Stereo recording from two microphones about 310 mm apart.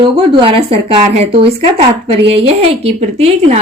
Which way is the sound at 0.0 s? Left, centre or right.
Centre.